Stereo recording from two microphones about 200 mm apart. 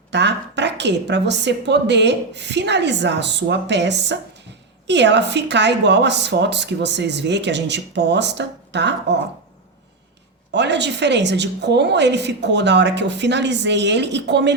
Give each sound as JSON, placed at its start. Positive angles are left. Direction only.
{"t": 0.1, "sound": "a woman's voice", "side_deg": -60}
{"t": 10.5, "sound": "a woman's voice", "side_deg": -60}